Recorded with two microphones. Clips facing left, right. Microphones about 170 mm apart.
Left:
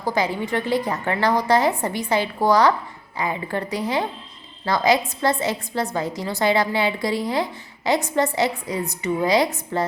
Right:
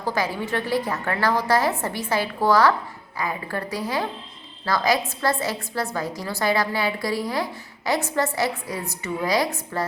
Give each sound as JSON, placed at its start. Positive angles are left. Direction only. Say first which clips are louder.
{"t": 0.0, "sound": "a woman's voice", "louder": "left 2 dB", "side_deg": 15}